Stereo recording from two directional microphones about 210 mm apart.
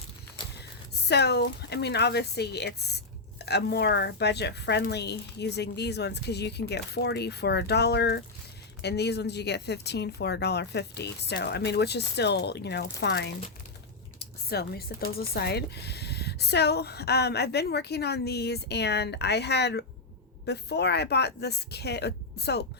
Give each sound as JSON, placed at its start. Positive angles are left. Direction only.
{"t": 1.0, "sound": "speech", "side_deg": 50}